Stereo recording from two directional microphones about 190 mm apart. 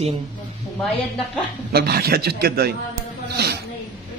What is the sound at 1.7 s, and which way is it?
Speech, 55° right (ahead or behind).